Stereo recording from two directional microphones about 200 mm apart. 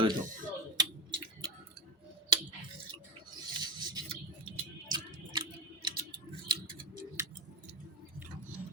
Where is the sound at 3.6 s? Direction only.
20° right (ahead or behind).